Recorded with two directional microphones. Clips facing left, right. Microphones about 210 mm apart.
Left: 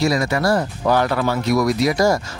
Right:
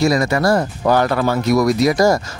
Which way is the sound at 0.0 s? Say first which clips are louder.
Right 3 dB; 45° right (ahead or behind).